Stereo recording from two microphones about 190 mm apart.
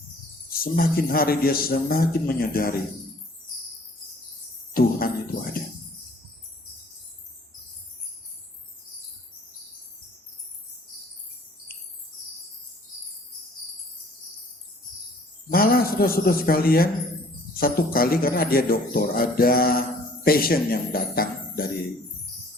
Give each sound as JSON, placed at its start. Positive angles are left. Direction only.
{"t": 0.6, "sound": "speech", "side_deg": 50}
{"t": 4.7, "sound": "music", "side_deg": 50}
{"t": 15.4, "sound": "a man's voice", "side_deg": 50}